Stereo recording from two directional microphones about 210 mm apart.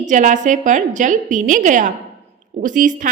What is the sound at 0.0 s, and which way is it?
A woman's voice, 35° right (ahead or behind).